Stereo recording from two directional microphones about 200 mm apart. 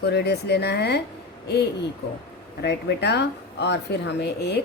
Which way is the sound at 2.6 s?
55° left (ahead or behind).